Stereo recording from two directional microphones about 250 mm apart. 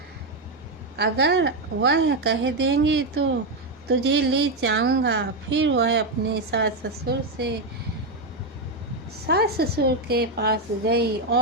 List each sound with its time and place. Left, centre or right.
0.9 s a woman's voice: right
9.2 s a woman's voice: right